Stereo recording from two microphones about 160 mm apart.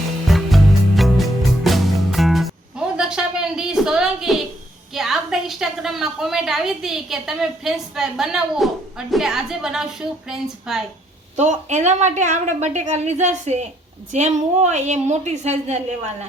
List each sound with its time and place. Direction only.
0.3 s music: centre (ahead or behind)
4.9 s a woman's voice: centre (ahead or behind)
11.3 s a woman's voice: 45° right (ahead or behind)